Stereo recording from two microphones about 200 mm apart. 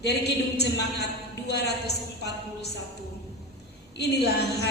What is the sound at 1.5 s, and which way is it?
Speech, 55° left (ahead or behind).